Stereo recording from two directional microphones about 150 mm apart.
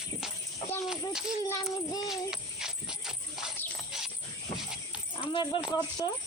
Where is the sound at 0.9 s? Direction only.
5° right (ahead or behind).